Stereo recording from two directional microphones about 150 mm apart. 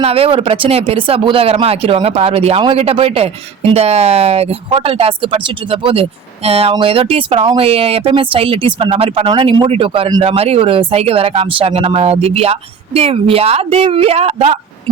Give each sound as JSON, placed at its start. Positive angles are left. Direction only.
{"t": 0.0, "sound": "speech", "side_deg": -40}
{"t": 10.2, "sound": "speech", "side_deg": -45}